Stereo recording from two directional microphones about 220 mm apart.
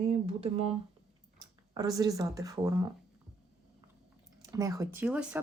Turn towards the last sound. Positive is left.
turn(degrees=-5)  # may be behind; listen again after turning